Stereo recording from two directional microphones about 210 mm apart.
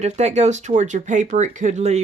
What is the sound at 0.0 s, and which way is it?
Speech, 30° right (ahead or behind).